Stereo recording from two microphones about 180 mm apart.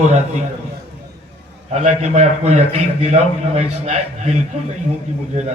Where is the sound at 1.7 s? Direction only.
40° right (ahead or behind).